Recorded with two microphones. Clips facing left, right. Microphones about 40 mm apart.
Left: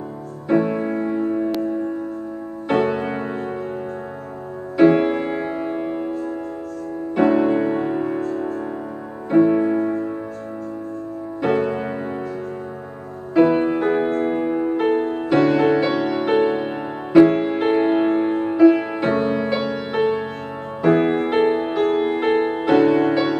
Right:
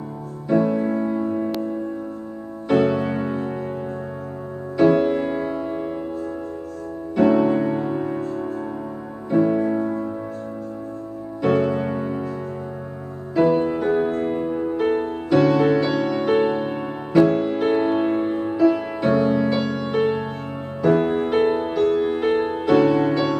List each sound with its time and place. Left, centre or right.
0.5 s music: left
2.7 s music: left
4.7 s music: left
7.2 s music: left
9.3 s music: left
11.4 s music: centre
13.3 s music: left